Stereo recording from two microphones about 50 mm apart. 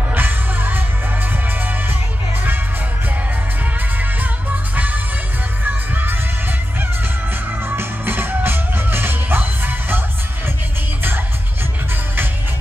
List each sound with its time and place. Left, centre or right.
0.1 s music: right
4.0 s music: right
7.6 s music: right